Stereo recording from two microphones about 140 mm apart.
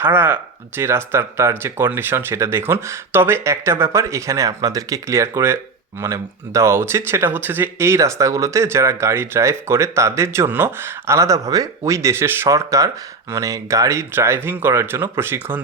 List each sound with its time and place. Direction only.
0.0 s speech: 15° right (ahead or behind)